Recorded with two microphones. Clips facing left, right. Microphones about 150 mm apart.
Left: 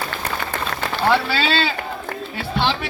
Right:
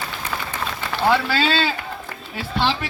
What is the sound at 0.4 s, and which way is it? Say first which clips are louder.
Run: left 4 dB; 70° left (ahead or behind).